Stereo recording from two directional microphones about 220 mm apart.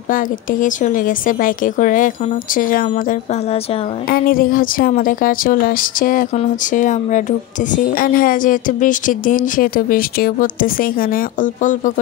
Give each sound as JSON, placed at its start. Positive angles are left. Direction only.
{"t": 0.1, "sound": "a woman's voice", "side_deg": 35}